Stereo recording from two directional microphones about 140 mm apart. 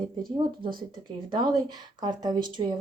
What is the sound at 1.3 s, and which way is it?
Speech, 30° right (ahead or behind).